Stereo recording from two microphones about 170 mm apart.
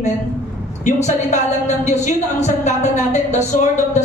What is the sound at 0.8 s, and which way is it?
A woman's voice, 45° left (ahead or behind).